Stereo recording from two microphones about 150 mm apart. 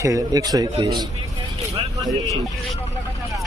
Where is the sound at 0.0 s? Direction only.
25° right (ahead or behind).